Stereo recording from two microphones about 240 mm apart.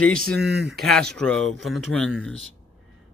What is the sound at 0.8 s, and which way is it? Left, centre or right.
Speech, centre.